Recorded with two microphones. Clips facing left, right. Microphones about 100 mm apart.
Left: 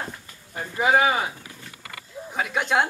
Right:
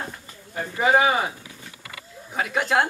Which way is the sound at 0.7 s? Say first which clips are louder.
Right 1 dB; centre (ahead or behind).